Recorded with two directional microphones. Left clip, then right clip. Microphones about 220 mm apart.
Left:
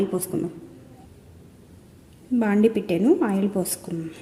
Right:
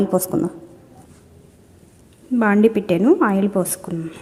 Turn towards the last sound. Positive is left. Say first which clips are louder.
# right 4 dB
turn(degrees=-5)  # may be behind; listen again after turning